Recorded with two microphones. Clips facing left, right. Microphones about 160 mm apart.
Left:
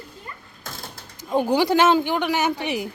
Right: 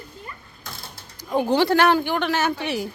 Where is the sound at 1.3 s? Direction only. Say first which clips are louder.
Even; 15° left (ahead or behind).